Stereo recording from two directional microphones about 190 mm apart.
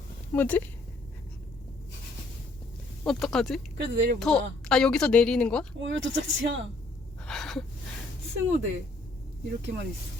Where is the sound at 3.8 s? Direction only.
65° right (ahead or behind).